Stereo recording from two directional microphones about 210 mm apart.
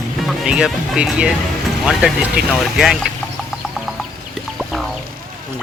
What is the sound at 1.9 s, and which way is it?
Music, 5° right (ahead or behind).